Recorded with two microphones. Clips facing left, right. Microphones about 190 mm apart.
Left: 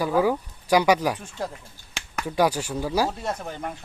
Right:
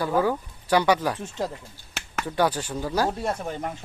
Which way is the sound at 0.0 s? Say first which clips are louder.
Left 2 dB; 10° left (ahead or behind).